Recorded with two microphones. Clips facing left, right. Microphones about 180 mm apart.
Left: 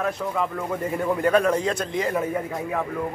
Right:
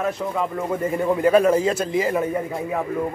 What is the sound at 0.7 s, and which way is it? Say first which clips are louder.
A man's voice: right 3 dB; 5° right (ahead or behind).